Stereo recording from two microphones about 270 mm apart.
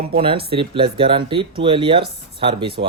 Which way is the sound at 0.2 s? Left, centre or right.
Centre.